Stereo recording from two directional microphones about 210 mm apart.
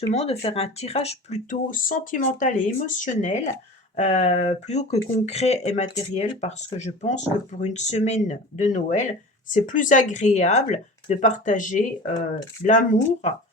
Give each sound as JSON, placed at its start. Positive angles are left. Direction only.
{"t": 0.1, "sound": "speech", "side_deg": 30}